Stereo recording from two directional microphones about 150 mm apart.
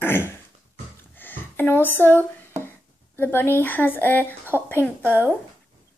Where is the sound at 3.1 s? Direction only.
15° left (ahead or behind).